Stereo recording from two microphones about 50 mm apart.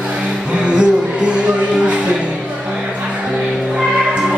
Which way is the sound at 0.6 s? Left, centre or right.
Right.